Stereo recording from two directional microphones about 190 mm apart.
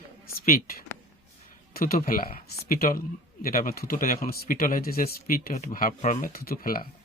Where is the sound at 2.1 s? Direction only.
50° left (ahead or behind).